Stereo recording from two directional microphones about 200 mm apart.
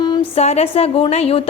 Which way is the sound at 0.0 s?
25° left (ahead or behind).